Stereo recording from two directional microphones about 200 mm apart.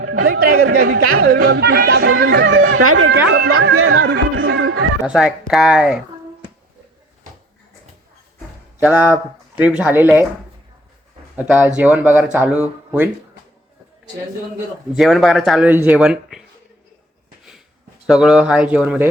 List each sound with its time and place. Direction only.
0.2 s speech: 50° right (ahead or behind)
0.7 s speech: 90° right
1.3 s speech: 50° right (ahead or behind); by 3.2 s 75° right (ahead or behind)
3.2 s speech: 55° right (ahead or behind)
3.5 s speech: 90° right
5.0 s speech: 5° right (ahead or behind)
8.8 s speech: 10° right (ahead or behind)
11.3 s speech: 5° right (ahead or behind)
14.9 s speech: centre (ahead or behind)
18.0 s speech: 5° right (ahead or behind)